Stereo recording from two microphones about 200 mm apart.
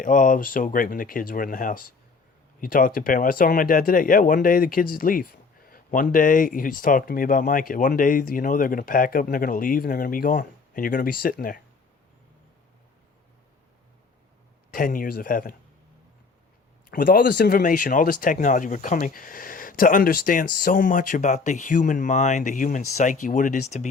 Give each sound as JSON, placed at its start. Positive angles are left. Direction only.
{"t": 0.0, "sound": "speech", "side_deg": 40}
{"t": 14.7, "sound": "speech", "side_deg": 45}
{"t": 16.9, "sound": "speech", "side_deg": 45}